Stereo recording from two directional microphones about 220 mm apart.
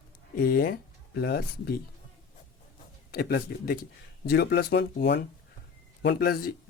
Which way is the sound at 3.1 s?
45° left (ahead or behind).